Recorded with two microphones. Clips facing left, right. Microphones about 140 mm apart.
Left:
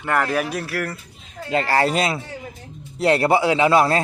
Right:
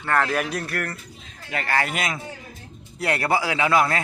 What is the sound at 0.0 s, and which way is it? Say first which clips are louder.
Speech: left 2 dB; 10° left (ahead or behind).